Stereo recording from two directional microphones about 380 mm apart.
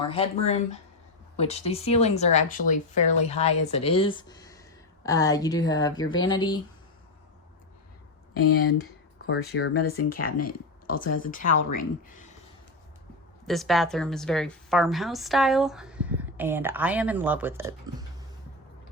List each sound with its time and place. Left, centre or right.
0.1 s speech: centre
8.4 s speech: left
10.9 s speech: left
11.3 s speech: left
13.5 s a woman's voice: centre